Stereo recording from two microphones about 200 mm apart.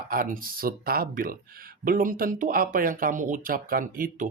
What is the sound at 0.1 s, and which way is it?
Speech, 45° right (ahead or behind).